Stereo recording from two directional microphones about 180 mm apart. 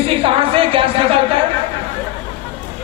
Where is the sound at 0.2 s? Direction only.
30° right (ahead or behind).